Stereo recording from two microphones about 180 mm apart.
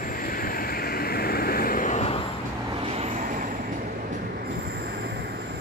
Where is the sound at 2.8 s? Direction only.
35° right (ahead or behind).